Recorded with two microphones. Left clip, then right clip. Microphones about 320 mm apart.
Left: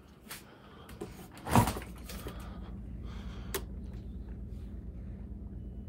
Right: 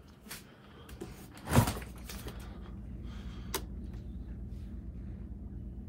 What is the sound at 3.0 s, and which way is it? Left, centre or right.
Gasp, left.